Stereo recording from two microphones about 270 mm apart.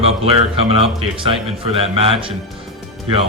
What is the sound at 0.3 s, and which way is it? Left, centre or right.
Speech, right.